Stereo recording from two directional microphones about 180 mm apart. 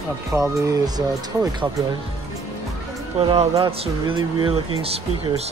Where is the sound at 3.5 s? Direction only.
30° right (ahead or behind).